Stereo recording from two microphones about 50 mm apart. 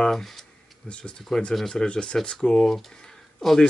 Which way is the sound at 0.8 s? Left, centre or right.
Left.